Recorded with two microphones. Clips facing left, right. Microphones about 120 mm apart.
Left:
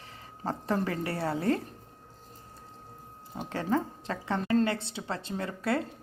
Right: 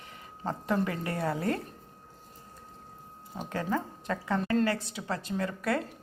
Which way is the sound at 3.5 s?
30° left (ahead or behind).